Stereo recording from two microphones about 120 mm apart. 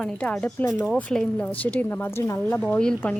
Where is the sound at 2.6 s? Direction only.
10° left (ahead or behind).